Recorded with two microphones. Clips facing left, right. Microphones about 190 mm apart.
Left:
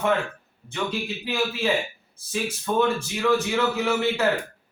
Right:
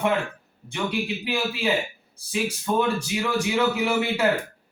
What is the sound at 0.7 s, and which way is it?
Speech, 15° right (ahead or behind).